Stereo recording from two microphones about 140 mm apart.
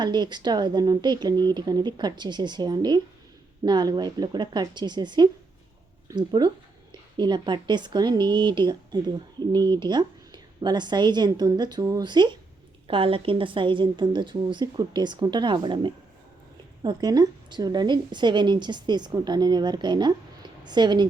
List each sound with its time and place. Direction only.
0.0 s speech: 30° right (ahead or behind)